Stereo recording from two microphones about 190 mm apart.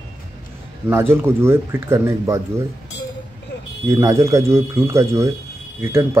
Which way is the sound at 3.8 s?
15° right (ahead or behind).